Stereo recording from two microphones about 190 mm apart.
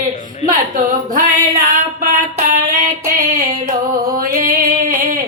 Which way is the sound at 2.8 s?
45° right (ahead or behind).